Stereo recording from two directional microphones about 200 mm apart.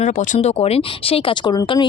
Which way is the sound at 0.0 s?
35° left (ahead or behind).